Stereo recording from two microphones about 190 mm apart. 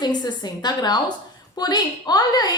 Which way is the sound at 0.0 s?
20° left (ahead or behind).